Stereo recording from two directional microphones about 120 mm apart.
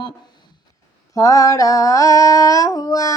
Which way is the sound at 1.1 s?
30° left (ahead or behind).